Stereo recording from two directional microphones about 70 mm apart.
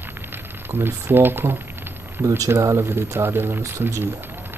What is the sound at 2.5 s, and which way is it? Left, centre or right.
Speech, right.